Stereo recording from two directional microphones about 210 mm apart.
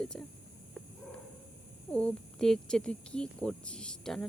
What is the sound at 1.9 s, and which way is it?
Speech, 5° left (ahead or behind).